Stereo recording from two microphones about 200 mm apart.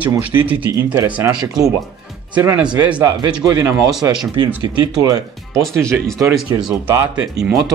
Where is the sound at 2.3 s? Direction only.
10° right (ahead or behind).